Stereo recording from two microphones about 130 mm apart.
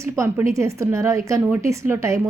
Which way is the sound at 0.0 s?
20° right (ahead or behind).